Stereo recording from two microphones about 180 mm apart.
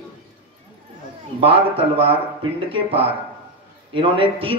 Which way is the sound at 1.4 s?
30° right (ahead or behind).